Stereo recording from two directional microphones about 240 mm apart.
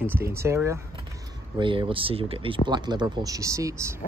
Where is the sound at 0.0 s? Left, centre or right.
Centre.